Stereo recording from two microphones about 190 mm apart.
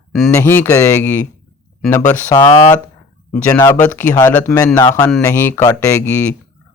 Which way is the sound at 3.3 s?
10° left (ahead or behind).